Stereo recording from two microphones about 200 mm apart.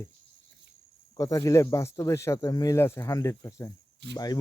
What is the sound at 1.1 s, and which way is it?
Speech, 15° left (ahead or behind).